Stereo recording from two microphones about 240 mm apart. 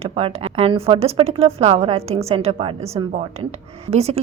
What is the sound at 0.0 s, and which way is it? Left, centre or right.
Speech, right.